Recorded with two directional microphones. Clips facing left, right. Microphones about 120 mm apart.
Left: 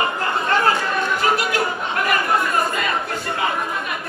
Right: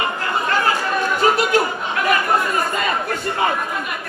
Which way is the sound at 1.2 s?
25° right (ahead or behind).